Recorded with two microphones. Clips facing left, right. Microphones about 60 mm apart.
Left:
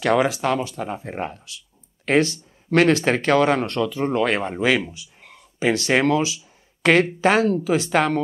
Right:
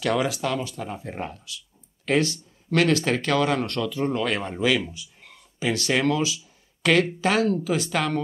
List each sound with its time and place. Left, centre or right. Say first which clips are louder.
0.0 s speech: left 5 dB; left
5.2 s a sound: left 6 dB; left
7.2 s speech: left 4 dB; left